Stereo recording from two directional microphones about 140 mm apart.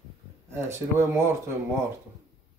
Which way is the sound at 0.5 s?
20° right (ahead or behind).